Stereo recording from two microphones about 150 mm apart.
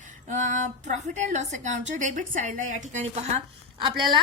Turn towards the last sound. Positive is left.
turn(degrees=-30)  # may be behind; listen again after turning